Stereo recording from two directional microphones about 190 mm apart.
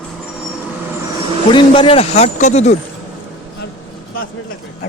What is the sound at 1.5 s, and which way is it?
Speech, 30° left (ahead or behind).